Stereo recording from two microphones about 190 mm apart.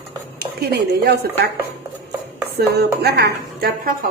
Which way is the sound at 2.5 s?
55° right (ahead or behind).